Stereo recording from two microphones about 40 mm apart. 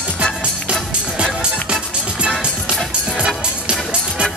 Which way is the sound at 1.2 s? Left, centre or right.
Right.